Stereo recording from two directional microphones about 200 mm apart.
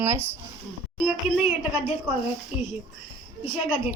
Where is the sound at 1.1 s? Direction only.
5° right (ahead or behind).